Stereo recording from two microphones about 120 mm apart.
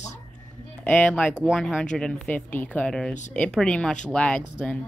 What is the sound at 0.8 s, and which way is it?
Speech, 10° left (ahead or behind).